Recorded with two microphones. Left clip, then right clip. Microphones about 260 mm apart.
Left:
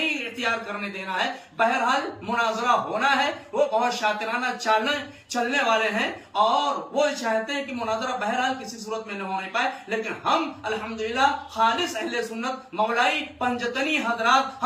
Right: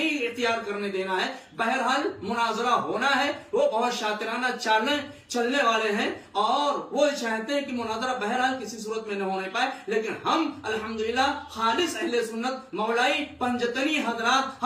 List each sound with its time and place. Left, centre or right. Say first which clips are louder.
0.0 s a man's voice: even; centre